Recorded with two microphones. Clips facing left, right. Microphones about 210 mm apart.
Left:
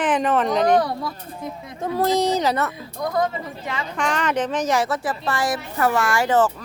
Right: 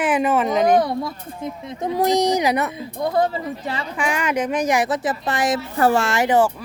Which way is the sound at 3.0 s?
30° right (ahead or behind).